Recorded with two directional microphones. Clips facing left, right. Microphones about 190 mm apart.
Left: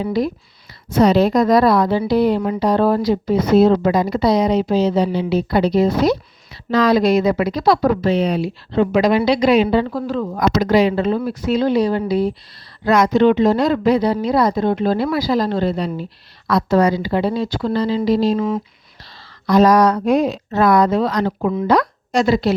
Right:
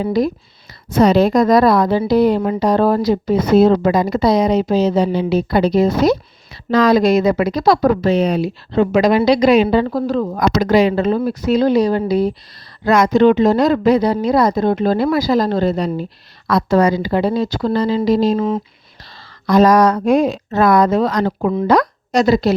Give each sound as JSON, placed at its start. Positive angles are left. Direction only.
{"t": 0.0, "sound": "a woman's voice", "side_deg": -40}
{"t": 19.5, "sound": "a woman's voice", "side_deg": -50}